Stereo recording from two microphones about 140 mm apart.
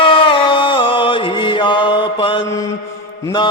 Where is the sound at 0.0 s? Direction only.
40° left (ahead or behind).